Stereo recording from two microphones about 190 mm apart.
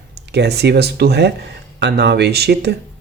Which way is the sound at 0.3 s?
60° right (ahead or behind).